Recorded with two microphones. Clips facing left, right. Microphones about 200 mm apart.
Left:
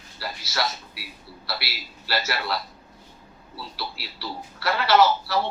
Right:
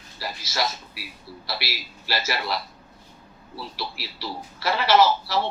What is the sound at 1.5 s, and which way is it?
A man's voice, 15° right (ahead or behind).